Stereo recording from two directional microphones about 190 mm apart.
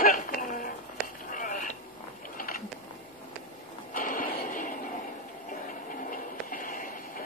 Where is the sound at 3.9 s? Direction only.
45° left (ahead or behind).